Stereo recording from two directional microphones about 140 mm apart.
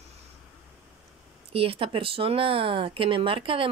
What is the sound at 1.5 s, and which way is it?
Speech, 40° right (ahead or behind).